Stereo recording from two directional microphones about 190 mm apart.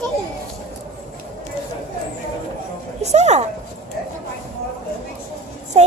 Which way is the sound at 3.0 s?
35° right (ahead or behind).